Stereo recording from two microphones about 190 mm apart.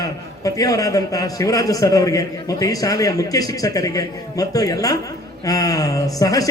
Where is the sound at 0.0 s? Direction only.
20° left (ahead or behind).